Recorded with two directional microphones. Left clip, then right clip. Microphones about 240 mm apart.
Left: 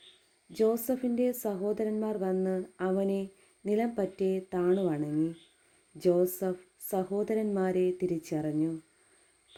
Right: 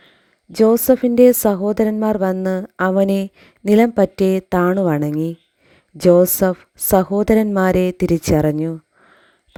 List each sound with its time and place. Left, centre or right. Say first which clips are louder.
0.5 s a woman's voice: right 15 dB; right